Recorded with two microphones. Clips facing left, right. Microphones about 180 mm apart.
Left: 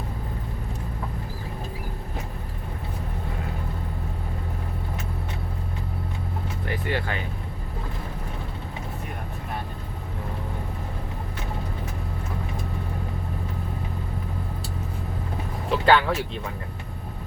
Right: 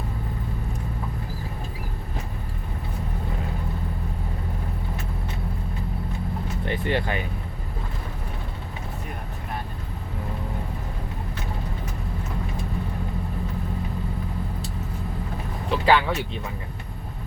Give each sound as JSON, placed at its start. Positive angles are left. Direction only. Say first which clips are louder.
{"t": 6.7, "sound": "vehicle", "louder": "right 3 dB", "side_deg": -20}
{"t": 15.7, "sound": "speech", "louder": "left 1 dB", "side_deg": 0}